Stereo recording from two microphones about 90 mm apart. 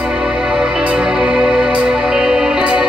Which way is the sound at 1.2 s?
10° right (ahead or behind).